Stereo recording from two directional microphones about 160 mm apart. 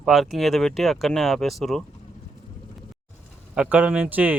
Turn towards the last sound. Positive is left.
turn(degrees=-10)  # may be behind; listen again after turning